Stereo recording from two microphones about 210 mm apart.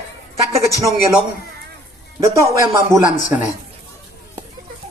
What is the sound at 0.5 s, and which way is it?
Speech, 15° right (ahead or behind).